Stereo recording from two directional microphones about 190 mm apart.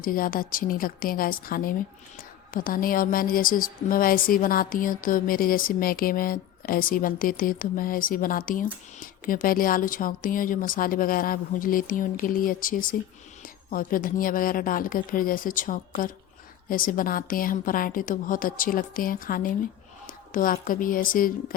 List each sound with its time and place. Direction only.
0.0 s speech: 50° left (ahead or behind)